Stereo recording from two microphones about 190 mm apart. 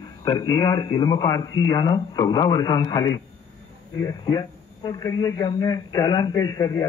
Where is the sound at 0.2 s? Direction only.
20° left (ahead or behind).